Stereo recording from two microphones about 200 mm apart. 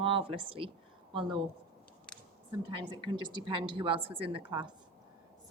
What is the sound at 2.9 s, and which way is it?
A woman's voice, 20° right (ahead or behind).